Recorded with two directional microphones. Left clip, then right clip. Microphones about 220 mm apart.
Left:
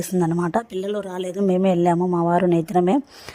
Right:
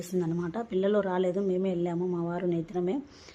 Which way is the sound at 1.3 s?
40° left (ahead or behind).